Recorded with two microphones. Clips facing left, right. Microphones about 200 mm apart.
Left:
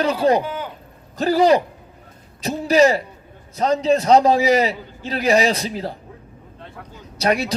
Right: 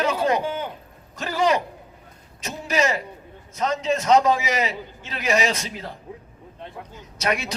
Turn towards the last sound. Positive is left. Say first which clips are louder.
# left 5 dB
turn(degrees=35)  # may be behind; listen again after turning